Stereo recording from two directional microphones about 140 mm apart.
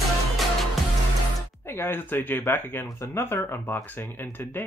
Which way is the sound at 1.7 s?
15° left (ahead or behind).